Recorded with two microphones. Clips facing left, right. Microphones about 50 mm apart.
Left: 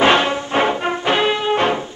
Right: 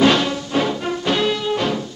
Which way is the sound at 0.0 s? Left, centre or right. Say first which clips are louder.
Left 2 dB; left.